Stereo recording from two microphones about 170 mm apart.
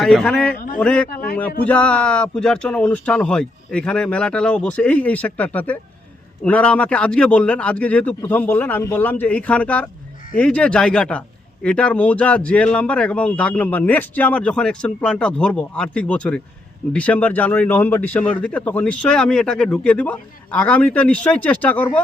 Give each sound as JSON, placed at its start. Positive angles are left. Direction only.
{"t": 0.0, "sound": "a man's voice", "side_deg": 5}
{"t": 0.5, "sound": "a man's voice", "side_deg": 60}
{"t": 0.8, "sound": "speech", "side_deg": 5}